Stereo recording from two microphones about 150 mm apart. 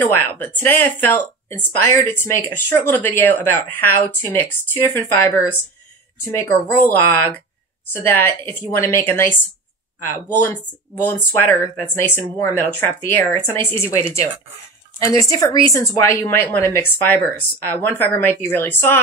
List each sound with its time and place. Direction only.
0.0 s a woman's voice: 15° left (ahead or behind)
11.0 s a woman's voice: 15° left (ahead or behind)